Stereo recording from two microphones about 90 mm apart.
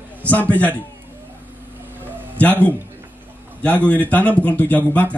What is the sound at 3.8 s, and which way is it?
Speech, 20° left (ahead or behind).